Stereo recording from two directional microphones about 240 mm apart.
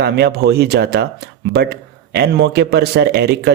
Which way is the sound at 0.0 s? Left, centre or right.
Right.